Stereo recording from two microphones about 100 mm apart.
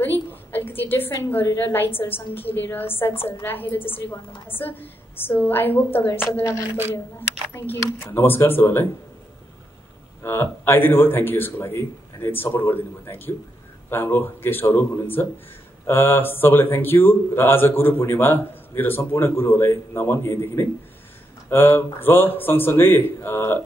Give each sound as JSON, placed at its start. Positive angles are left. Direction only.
{"t": 0.3, "sound": "a woman's voice", "side_deg": 20}
{"t": 10.2, "sound": "speech", "side_deg": 25}